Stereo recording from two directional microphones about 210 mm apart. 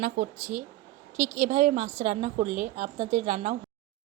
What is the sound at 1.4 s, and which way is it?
Speech, 35° right (ahead or behind).